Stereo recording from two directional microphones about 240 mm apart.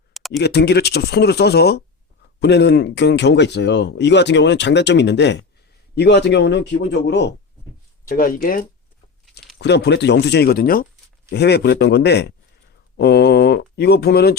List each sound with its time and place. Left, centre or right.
0.1 s a sound: centre
0.3 s speech: left
8.0 s speech: left